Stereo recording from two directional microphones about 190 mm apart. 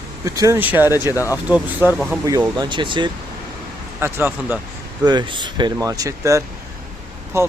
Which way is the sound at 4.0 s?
10° right (ahead or behind).